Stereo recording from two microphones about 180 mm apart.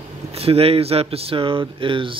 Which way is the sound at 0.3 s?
35° right (ahead or behind).